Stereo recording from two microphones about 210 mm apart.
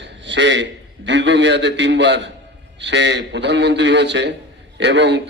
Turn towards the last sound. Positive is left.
turn(degrees=-55)  # may be behind; listen again after turning